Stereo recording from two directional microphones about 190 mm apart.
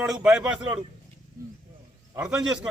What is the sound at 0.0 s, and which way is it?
Speech, 5° right (ahead or behind).